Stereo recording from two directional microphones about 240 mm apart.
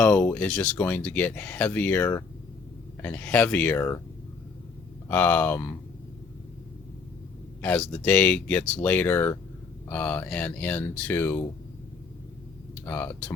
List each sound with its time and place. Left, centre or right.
0.0 s speech: centre
5.0 s speech: centre
7.6 s speech: centre
12.8 s speech: centre